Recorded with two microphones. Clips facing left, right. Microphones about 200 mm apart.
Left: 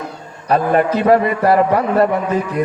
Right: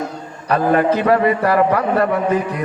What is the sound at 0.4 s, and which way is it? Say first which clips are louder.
A man's voice: even; 30° left (ahead or behind).